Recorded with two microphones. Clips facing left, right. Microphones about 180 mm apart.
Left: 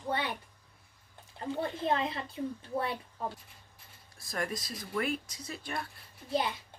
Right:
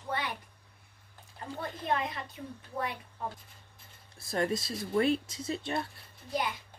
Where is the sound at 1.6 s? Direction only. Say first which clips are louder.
Left 2 dB; 25° left (ahead or behind).